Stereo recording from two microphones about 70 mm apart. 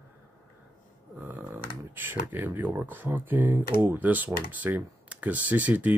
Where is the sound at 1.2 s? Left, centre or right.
Right.